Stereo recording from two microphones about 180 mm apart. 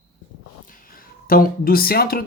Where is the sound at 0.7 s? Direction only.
50° left (ahead or behind).